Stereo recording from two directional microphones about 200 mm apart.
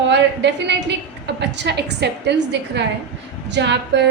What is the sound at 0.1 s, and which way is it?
A woman's voice, 60° right (ahead or behind).